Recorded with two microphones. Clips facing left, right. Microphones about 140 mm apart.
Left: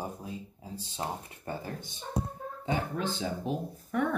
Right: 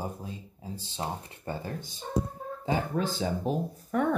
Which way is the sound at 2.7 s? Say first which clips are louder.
Right 3 dB; 40° right (ahead or behind).